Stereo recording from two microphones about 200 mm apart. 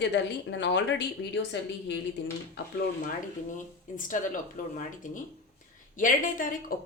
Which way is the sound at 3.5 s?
40° left (ahead or behind).